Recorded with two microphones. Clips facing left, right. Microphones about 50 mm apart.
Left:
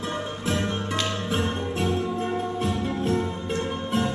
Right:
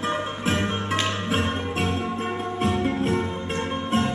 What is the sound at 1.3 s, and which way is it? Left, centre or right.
Music, right.